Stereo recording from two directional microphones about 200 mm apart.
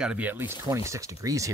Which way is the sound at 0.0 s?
5° right (ahead or behind).